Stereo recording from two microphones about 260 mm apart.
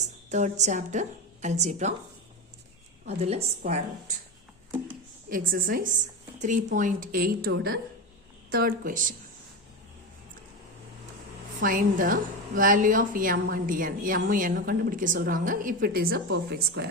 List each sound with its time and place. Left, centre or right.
0.3 s a woman's voice: right
3.1 s a woman's voice: right
5.3 s a woman's voice: right
11.6 s a woman's voice: right